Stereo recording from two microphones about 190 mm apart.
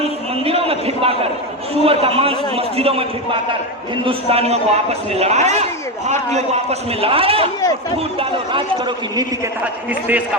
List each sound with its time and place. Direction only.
0.7 s a sound: 30° right (ahead or behind)
1.8 s a man's voice: 30° right (ahead or behind)
9.9 s a man's voice: 10° right (ahead or behind)